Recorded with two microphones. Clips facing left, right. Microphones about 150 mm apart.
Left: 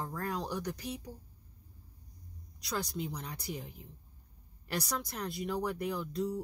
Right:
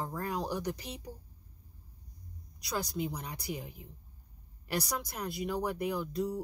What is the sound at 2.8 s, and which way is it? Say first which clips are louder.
Speech: right 3 dB; 10° right (ahead or behind).